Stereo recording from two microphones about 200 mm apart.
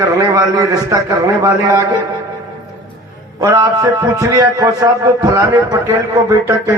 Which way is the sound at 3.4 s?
15° right (ahead or behind).